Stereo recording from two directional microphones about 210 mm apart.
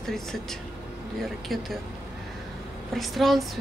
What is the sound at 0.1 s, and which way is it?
Speech, centre (ahead or behind).